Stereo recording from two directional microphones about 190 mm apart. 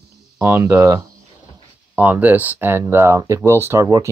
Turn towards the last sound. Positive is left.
turn(degrees=-15)  # may be behind; listen again after turning